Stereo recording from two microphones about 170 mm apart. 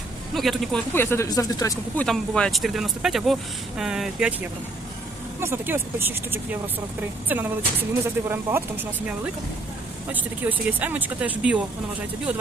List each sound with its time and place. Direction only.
0.3 s speech: centre (ahead or behind)
0.9 s speech: 15° left (ahead or behind)
2.0 s speech: 5° left (ahead or behind)
5.4 s speech: 15° right (ahead or behind)